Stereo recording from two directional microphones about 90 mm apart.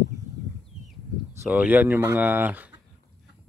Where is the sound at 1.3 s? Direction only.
30° right (ahead or behind).